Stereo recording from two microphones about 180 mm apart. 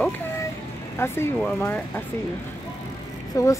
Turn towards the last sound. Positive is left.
turn(degrees=20)  # may be behind; listen again after turning